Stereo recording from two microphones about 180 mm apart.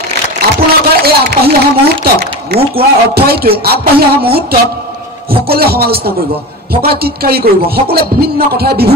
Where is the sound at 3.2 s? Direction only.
60° right (ahead or behind).